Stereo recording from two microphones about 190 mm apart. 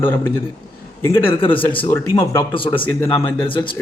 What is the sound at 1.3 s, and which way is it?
Speech, 25° left (ahead or behind).